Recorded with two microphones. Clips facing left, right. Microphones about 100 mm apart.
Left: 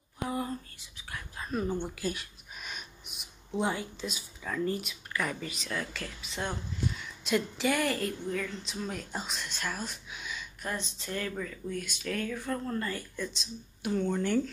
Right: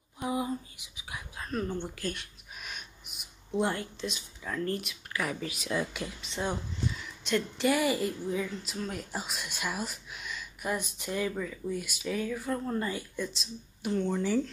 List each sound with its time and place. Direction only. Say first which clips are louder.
0.3 s whispering: right 3 dB; 10° right (ahead or behind)
1.3 s speech: left 1 dB; 5° left (ahead or behind)
5.7 s speech: right 5 dB; 15° right (ahead or behind)
6.2 s a woman's voice: right 2 dB; centre (ahead or behind)
10.6 s a woman's voice: right 4 dB; 15° right (ahead or behind)